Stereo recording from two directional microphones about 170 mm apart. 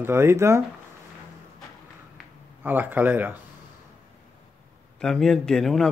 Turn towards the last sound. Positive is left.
turn(degrees=0)  # may be behind; listen again after turning